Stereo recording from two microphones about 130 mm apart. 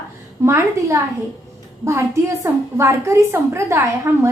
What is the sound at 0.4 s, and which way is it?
A woman's voice, 20° right (ahead or behind).